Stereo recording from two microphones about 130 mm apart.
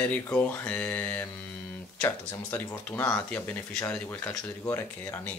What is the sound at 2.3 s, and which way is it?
Speech, 15° left (ahead or behind).